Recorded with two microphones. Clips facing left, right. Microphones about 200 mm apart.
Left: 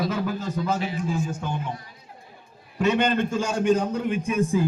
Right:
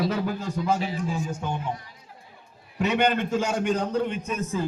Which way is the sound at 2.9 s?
15° right (ahead or behind).